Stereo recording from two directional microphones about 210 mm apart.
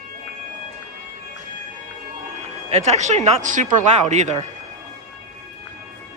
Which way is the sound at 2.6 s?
30° right (ahead or behind).